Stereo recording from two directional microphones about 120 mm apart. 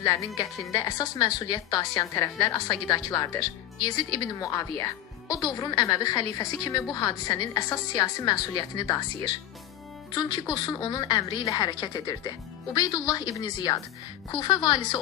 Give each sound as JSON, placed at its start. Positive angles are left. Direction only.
{"t": 0.0, "sound": "a woman's voice", "side_deg": 30}